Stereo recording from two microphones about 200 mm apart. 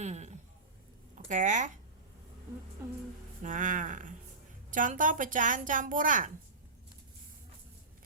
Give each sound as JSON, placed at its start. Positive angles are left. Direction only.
{"t": 0.0, "sound": "a sound", "side_deg": -35}
{"t": 1.3, "sound": "a woman's voice", "side_deg": -40}
{"t": 3.4, "sound": "a woman's voice", "side_deg": -40}